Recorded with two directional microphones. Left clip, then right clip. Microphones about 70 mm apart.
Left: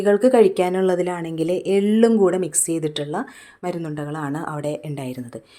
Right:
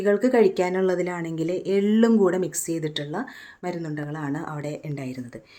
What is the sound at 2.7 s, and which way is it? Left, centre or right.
Speech, left.